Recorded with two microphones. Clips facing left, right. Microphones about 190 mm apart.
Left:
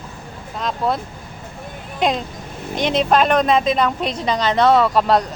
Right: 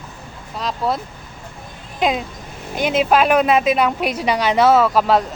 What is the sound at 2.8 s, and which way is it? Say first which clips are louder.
A woman's voice: right 1 dB; 5° right (ahead or behind).